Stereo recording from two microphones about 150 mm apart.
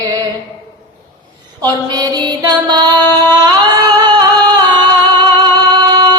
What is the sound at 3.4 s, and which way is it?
Singing, 30° right (ahead or behind).